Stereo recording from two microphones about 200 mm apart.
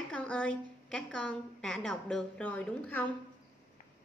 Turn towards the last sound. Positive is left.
turn(degrees=5)  # may be behind; listen again after turning